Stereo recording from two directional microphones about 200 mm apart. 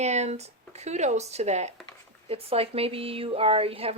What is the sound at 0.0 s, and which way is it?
Speech, 35° right (ahead or behind).